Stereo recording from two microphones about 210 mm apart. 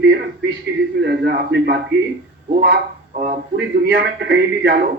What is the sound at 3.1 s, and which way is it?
A man's voice, 45° right (ahead or behind).